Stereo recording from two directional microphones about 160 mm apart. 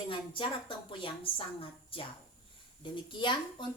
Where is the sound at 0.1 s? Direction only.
30° left (ahead or behind).